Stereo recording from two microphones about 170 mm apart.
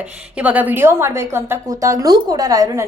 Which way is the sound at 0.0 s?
5° right (ahead or behind).